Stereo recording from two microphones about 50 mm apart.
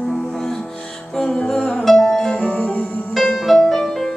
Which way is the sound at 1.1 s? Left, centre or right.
Centre.